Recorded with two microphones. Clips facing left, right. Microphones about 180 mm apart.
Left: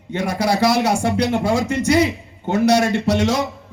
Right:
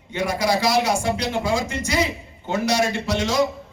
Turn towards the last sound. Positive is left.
turn(degrees=65)  # may be behind; listen again after turning